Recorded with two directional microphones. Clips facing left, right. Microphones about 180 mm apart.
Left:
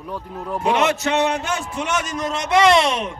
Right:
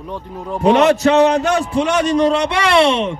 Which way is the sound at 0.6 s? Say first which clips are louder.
Right 8 dB; 35° right (ahead or behind).